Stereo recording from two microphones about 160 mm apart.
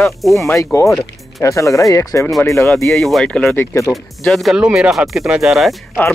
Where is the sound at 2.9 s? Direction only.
Centre (ahead or behind).